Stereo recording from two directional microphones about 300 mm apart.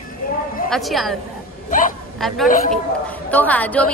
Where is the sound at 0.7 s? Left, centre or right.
Centre.